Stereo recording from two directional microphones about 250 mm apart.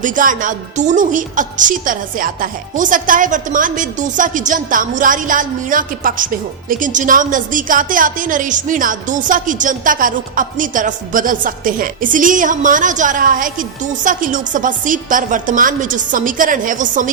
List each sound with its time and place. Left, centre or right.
0.0 s a woman's voice: right